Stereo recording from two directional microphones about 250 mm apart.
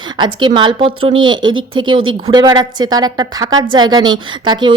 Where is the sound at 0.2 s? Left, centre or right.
Centre.